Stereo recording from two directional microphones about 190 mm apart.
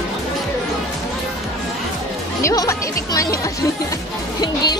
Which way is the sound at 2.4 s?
15° left (ahead or behind).